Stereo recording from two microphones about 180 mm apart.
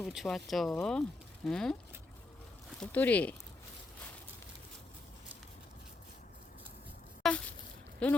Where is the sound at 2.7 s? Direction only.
10° left (ahead or behind).